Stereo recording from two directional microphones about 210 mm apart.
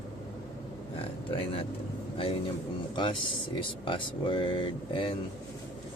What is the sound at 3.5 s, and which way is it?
Speech, 25° left (ahead or behind).